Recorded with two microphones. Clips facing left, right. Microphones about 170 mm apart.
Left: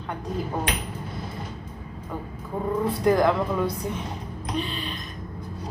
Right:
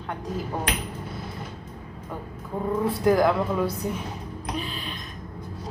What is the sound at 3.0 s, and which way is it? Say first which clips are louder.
Speech: even; centre (ahead or behind).